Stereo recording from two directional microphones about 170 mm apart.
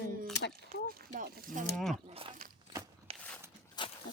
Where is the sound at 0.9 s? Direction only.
60° right (ahead or behind).